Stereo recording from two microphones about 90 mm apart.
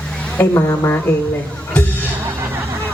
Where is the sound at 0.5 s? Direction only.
25° left (ahead or behind).